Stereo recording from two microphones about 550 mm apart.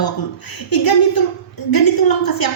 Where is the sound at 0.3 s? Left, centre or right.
Left.